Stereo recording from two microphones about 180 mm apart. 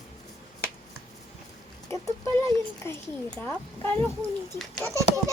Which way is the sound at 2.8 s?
15° left (ahead or behind).